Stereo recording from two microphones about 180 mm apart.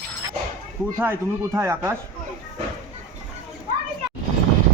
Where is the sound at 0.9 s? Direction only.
10° right (ahead or behind).